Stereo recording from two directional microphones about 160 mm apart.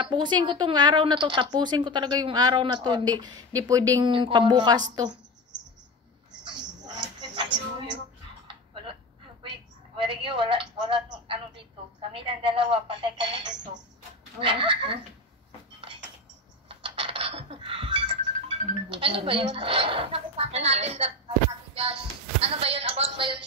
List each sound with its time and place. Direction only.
0.0 s a woman's voice: 30° right (ahead or behind)
6.4 s a sound: 25° right (ahead or behind)
9.4 s a woman's voice: 30° right (ahead or behind)
14.4 s a woman's voice: 30° right (ahead or behind)
16.6 s a sound: 35° right (ahead or behind)
18.9 s a woman's voice: 35° right (ahead or behind)